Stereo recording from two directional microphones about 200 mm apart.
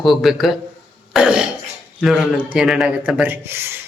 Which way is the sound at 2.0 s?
Centre (ahead or behind).